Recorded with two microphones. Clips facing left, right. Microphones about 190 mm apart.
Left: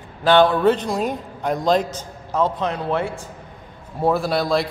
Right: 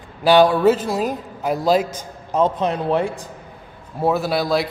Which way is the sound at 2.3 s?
20° right (ahead or behind).